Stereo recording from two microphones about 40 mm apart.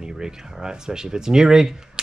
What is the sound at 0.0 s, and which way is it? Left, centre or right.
Speech, centre.